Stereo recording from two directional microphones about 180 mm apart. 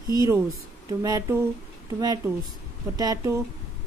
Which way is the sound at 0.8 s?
20° right (ahead or behind).